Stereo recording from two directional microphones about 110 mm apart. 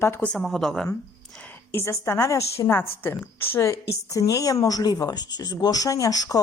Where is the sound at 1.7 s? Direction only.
25° left (ahead or behind).